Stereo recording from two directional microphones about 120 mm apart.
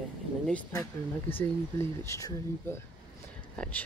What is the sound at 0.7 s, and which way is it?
Speech, 20° left (ahead or behind).